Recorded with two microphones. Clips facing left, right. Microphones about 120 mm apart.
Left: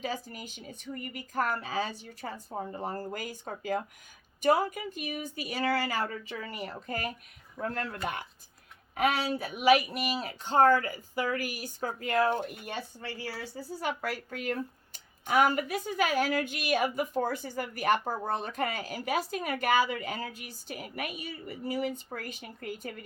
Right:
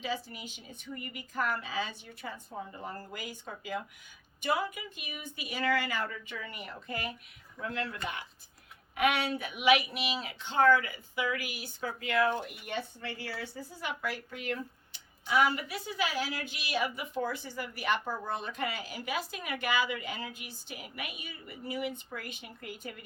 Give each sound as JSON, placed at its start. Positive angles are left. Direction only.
{"t": 0.0, "sound": "a woman's voice", "side_deg": 45}
{"t": 9.0, "sound": "a woman's voice", "side_deg": 35}